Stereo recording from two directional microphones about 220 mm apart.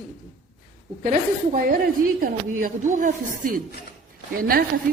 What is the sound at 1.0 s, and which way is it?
Speech, 40° right (ahead or behind).